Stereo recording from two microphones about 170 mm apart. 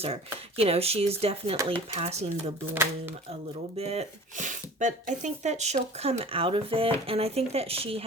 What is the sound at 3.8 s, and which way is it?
Speech, 40° right (ahead or behind).